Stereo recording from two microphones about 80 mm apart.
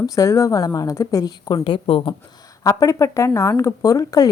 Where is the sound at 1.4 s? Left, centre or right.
Left.